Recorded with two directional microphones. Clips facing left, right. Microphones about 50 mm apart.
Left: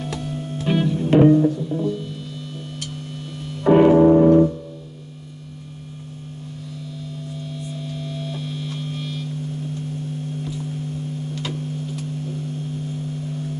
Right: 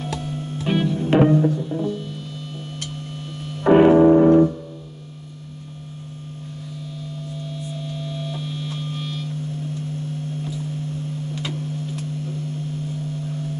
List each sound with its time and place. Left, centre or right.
0.7 s music: right
3.6 s music: right